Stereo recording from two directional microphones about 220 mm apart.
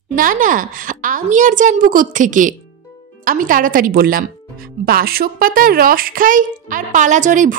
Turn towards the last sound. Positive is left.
turn(degrees=-35)  # may be behind; listen again after turning